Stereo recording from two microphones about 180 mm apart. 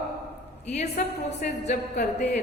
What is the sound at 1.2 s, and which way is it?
Speech, 40° left (ahead or behind).